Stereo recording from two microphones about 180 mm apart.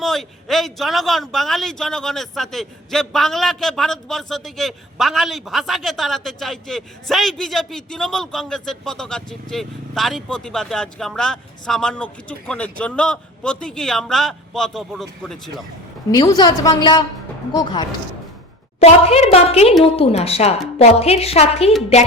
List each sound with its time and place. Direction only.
0.0 s speech: centre (ahead or behind)
16.1 s a woman's voice: 20° left (ahead or behind)
18.8 s a woman's voice: 35° left (ahead or behind)